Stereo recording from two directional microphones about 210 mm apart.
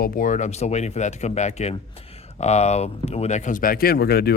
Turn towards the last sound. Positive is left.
turn(degrees=50)  # may be behind; listen again after turning